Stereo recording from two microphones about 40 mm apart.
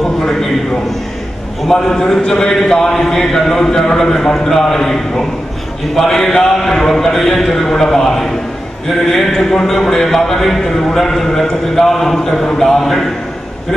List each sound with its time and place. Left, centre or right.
0.2 s a man's voice: centre
2.0 s a man's voice: centre